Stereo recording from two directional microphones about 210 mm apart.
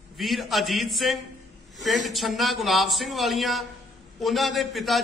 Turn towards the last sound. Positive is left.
turn(degrees=0)  # may be behind; listen again after turning